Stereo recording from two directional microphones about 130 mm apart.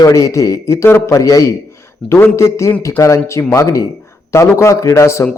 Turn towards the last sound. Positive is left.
turn(degrees=20)  # may be behind; listen again after turning